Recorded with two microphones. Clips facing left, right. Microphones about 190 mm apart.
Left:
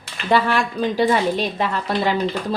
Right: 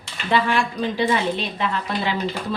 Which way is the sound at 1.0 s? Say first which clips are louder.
Left 4 dB; 40° left (ahead or behind).